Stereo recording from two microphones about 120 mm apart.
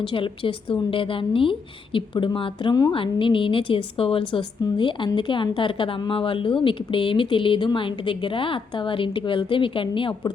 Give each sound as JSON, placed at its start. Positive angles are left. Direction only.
{"t": 0.1, "sound": "a woman's voice", "side_deg": 45}